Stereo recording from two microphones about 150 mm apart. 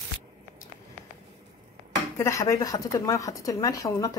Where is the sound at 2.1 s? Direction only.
20° left (ahead or behind).